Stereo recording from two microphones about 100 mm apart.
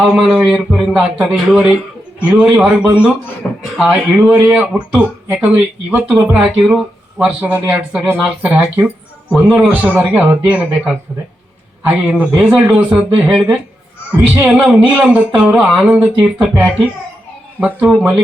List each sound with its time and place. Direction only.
0.0 s speech: 10° right (ahead or behind)
3.4 s a sound: 10° left (ahead or behind)
3.8 s speech: 10° right (ahead or behind)
17.6 s speech: 15° right (ahead or behind)